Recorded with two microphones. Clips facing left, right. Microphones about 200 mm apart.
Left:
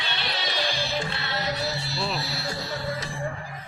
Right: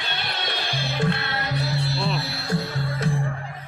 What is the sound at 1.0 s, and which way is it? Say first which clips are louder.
Music: right 5 dB; 60° right (ahead or behind).